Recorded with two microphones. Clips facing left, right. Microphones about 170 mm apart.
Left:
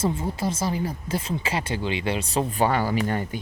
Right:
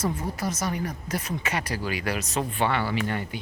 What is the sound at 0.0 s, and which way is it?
Speech, 25° left (ahead or behind).